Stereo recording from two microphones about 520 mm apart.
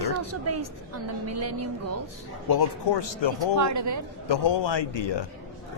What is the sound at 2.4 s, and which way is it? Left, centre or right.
Speech, left.